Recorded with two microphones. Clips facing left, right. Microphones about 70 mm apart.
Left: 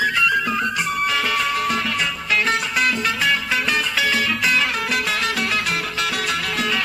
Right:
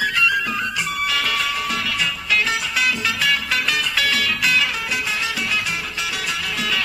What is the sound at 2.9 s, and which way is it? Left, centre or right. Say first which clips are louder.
Music: left 1 dB; centre.